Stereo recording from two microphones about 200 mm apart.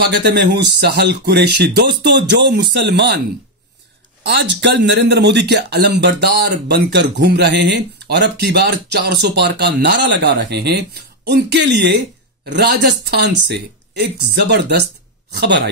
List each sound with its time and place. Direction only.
0.0 s speech: 55° right (ahead or behind)
4.2 s speech: 60° right (ahead or behind)